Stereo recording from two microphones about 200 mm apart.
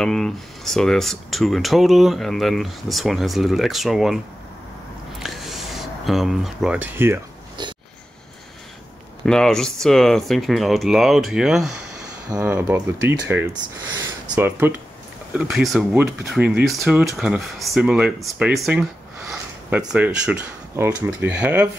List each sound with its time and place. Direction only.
0.0 s speech: 5° left (ahead or behind)
5.2 s a sound: centre (ahead or behind)
7.6 s a sound: 20° right (ahead or behind)
9.2 s speech: 5° left (ahead or behind)
12.3 s speech: 15° right (ahead or behind)
14.3 s speech: 10° right (ahead or behind)